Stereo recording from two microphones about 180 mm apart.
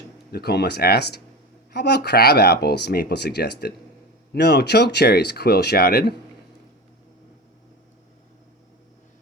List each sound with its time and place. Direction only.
0.3 s speech: 60° left (ahead or behind)